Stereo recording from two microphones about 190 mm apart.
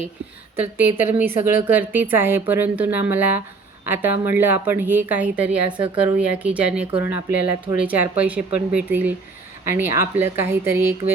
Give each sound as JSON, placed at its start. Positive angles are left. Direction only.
{"t": 0.5, "sound": "a woman's voice", "side_deg": -10}
{"t": 5.6, "sound": "speech", "side_deg": -25}
{"t": 6.1, "sound": "a woman's voice", "side_deg": -5}